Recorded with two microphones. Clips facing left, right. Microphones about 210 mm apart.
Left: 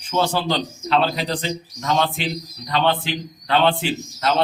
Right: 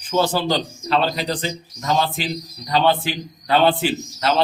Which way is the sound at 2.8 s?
10° right (ahead or behind).